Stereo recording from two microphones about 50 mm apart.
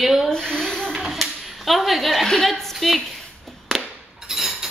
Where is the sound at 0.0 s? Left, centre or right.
Centre.